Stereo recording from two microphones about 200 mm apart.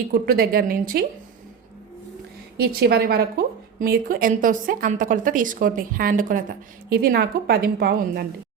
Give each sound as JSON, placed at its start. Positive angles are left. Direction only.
{"t": 0.1, "sound": "a woman's voice", "side_deg": -45}
{"t": 2.6, "sound": "a woman's voice", "side_deg": -50}